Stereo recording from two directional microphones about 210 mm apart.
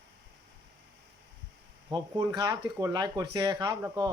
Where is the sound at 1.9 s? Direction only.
20° right (ahead or behind).